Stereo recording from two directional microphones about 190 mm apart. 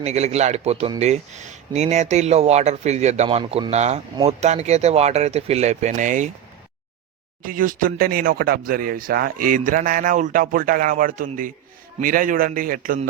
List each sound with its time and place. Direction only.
0.0 s speech: 35° right (ahead or behind)
7.4 s speech: 45° right (ahead or behind)